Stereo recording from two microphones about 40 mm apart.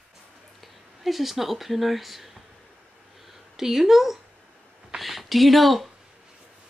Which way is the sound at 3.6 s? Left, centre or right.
Centre.